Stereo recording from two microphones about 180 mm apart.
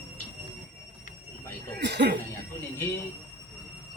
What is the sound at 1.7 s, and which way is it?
Speech, 70° right (ahead or behind).